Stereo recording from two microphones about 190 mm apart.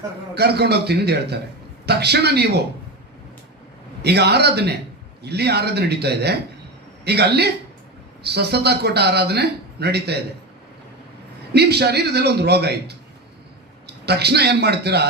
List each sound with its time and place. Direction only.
0.3 s speech: 60° right (ahead or behind)
4.0 s speech: 60° right (ahead or behind)
11.5 s a man's voice: 60° right (ahead or behind)